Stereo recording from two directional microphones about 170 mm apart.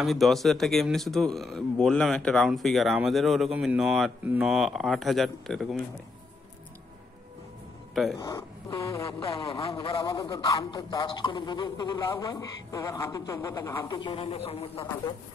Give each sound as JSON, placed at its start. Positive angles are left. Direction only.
{"t": 0.0, "sound": "speech", "side_deg": 0}
{"t": 7.9, "sound": "speech", "side_deg": 0}
{"t": 8.2, "sound": "speech", "side_deg": 20}
{"t": 9.3, "sound": "a man's voice", "side_deg": 35}